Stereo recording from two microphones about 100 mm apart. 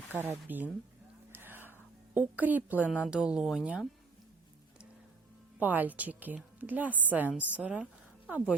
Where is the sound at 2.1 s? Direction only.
15° right (ahead or behind).